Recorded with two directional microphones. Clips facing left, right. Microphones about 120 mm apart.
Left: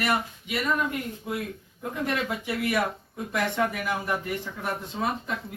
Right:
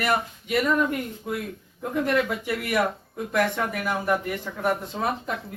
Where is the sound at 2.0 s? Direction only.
50° right (ahead or behind).